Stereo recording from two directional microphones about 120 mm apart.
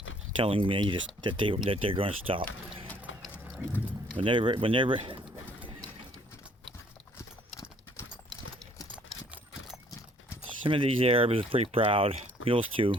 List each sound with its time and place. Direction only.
0.4 s speech: 50° right (ahead or behind)
4.1 s speech: 45° right (ahead or behind)
10.7 s speech: 50° right (ahead or behind)